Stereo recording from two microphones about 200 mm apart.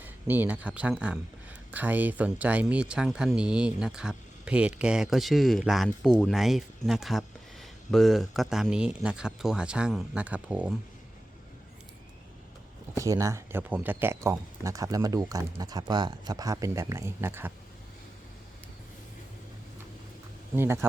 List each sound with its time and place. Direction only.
0.0 s speech: 10° right (ahead or behind)
13.0 s speech: 15° right (ahead or behind)
20.6 s speech: 10° right (ahead or behind)